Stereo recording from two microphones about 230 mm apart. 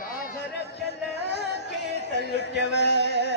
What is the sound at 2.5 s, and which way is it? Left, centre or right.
Music, left.